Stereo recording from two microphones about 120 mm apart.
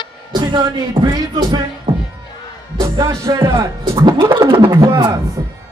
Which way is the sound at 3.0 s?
25° right (ahead or behind).